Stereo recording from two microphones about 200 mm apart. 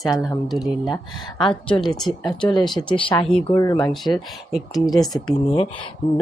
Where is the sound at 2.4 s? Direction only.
20° left (ahead or behind).